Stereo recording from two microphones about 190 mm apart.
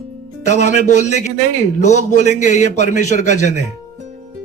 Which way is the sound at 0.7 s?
40° left (ahead or behind).